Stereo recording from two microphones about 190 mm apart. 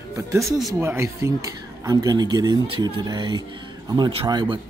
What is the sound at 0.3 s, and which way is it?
Speech, 15° right (ahead or behind).